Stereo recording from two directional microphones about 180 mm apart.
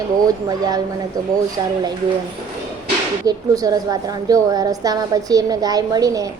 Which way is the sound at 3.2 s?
20° right (ahead or behind).